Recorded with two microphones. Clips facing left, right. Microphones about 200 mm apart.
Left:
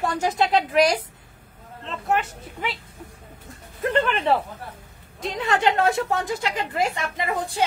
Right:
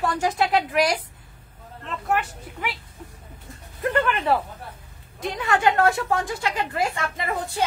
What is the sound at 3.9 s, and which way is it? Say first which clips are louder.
A woman's voice: left 1 dB; 25° left (ahead or behind).